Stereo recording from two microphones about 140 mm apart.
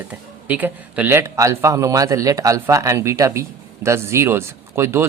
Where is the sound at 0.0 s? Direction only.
10° right (ahead or behind).